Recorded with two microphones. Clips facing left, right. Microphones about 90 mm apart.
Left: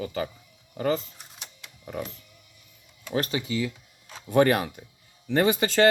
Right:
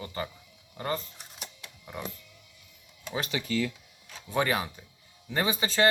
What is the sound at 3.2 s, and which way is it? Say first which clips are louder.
Speech: left 4 dB; 35° left (ahead or behind).